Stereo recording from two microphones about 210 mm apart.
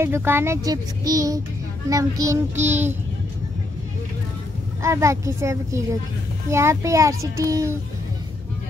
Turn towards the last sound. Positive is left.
turn(degrees=-15)  # may be behind; listen again after turning